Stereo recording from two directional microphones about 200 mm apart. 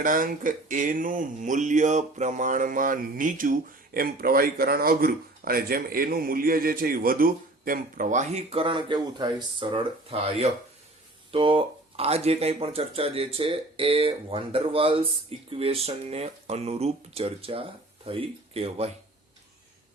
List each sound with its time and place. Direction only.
0.0 s speech: 45° right (ahead or behind)